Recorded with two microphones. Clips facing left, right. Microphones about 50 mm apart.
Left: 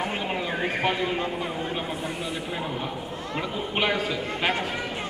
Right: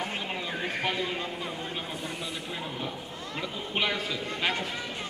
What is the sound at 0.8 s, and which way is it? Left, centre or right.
Speech, centre.